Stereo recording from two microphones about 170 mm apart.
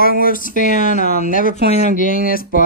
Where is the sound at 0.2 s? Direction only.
55° left (ahead or behind).